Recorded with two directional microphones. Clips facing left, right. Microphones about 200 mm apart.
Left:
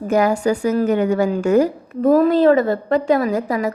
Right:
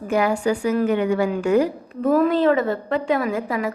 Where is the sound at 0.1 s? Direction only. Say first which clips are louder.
Left 3 dB; 45° left (ahead or behind).